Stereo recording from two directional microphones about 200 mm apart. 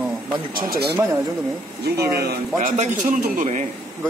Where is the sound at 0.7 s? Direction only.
55° right (ahead or behind).